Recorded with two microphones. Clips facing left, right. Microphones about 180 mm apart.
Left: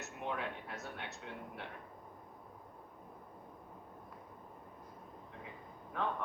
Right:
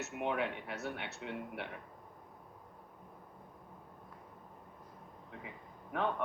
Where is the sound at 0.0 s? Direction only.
65° right (ahead or behind).